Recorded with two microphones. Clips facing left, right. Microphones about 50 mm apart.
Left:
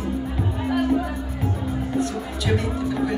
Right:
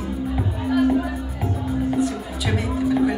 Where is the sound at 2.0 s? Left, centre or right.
Centre.